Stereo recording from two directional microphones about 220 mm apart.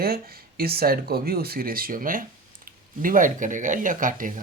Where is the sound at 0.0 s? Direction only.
40° right (ahead or behind).